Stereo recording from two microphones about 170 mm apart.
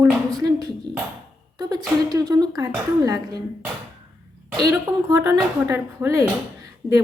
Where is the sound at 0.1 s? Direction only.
Centre (ahead or behind).